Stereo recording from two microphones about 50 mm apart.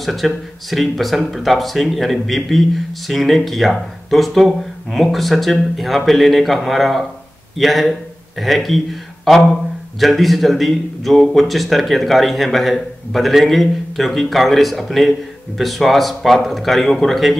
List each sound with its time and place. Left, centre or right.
0.0 s speech: centre